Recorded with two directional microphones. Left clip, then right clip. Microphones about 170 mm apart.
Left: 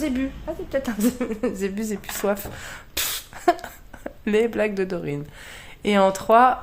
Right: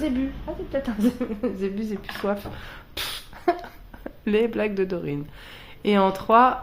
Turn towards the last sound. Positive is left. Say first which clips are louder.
# left 2 dB
turn(degrees=20)  # may be behind; listen again after turning